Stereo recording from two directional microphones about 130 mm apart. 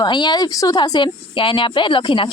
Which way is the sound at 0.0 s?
35° left (ahead or behind).